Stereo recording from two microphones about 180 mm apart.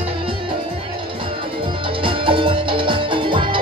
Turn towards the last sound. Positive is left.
turn(degrees=-25)  # may be behind; listen again after turning